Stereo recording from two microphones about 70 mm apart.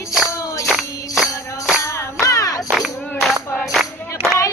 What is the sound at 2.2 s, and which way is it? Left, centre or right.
Music, left.